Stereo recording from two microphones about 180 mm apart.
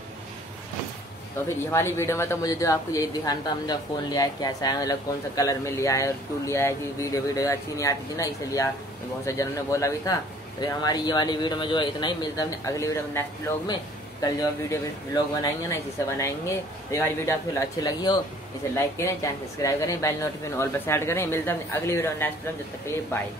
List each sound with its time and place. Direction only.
1.7 s a man's voice: 15° left (ahead or behind)